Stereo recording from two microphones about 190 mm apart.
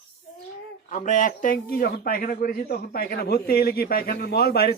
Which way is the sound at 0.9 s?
40° left (ahead or behind).